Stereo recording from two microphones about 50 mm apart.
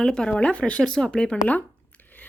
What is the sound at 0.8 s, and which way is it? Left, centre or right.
Speech, centre.